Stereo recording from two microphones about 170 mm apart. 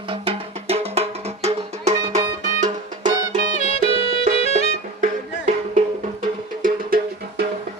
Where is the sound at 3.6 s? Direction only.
40° left (ahead or behind).